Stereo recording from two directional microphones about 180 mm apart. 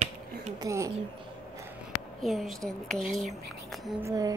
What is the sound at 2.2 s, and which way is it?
Speech, centre (ahead or behind).